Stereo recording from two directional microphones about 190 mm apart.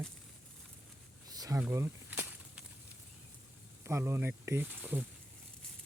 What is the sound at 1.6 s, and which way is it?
Speech, 10° right (ahead or behind).